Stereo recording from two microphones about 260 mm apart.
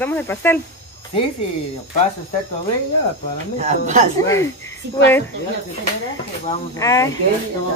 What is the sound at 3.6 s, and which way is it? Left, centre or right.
Speech, right.